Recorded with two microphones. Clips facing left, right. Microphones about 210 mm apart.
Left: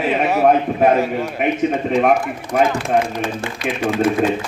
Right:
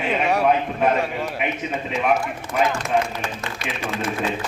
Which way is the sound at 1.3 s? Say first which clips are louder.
Left 8 dB; 50° left (ahead or behind).